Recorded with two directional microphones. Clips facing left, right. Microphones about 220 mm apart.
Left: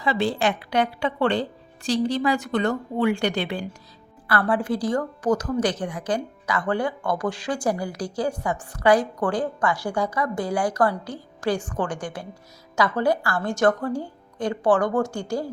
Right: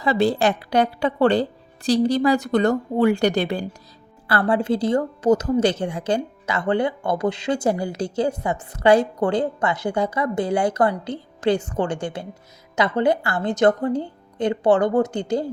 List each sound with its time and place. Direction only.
0.0 s speech: 40° right (ahead or behind)
4.3 s a woman's voice: 25° right (ahead or behind)